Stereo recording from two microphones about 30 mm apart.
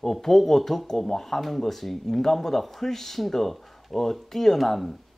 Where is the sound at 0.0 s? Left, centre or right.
Centre.